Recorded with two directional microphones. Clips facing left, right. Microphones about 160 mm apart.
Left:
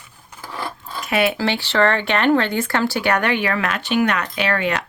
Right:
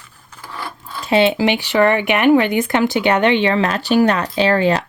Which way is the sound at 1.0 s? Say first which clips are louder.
Right 5 dB; 25° right (ahead or behind).